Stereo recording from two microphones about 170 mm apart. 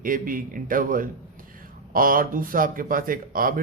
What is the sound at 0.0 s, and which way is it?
A man's voice, 55° right (ahead or behind).